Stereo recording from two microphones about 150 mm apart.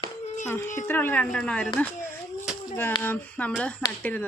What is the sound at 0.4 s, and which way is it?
Speech, 15° left (ahead or behind).